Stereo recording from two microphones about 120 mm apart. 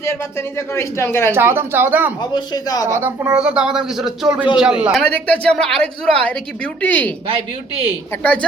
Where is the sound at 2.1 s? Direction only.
35° left (ahead or behind).